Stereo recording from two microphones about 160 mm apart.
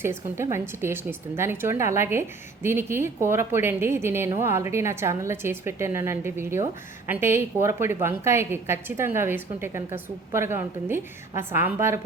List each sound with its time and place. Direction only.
0.0 s a woman's voice: 15° right (ahead or behind)